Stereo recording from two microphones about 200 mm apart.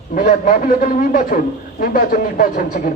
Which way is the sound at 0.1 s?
40° left (ahead or behind).